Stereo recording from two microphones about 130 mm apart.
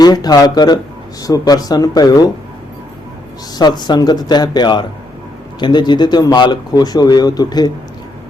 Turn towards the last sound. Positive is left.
turn(degrees=30)  # may be behind; listen again after turning